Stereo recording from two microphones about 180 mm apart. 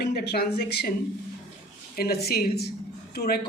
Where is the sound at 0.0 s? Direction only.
60° left (ahead or behind).